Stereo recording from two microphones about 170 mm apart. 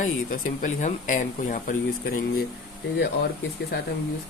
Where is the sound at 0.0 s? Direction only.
50° left (ahead or behind).